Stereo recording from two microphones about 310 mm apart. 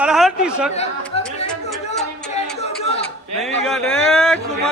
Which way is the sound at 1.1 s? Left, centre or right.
Centre.